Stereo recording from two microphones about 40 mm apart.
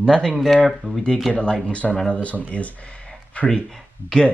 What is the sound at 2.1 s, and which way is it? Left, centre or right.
Speech, left.